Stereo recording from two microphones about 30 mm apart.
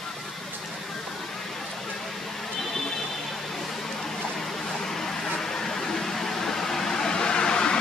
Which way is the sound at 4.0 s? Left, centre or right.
Centre.